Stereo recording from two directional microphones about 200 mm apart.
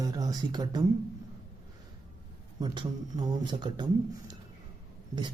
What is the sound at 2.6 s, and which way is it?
Speech, 20° right (ahead or behind).